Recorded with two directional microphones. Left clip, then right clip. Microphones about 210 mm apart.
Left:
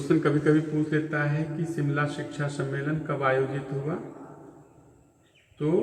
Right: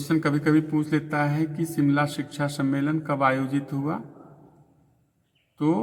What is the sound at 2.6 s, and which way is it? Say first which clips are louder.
Speech: right 6 dB; 50° right (ahead or behind).